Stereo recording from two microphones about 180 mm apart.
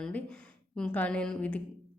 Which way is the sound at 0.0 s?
5° left (ahead or behind).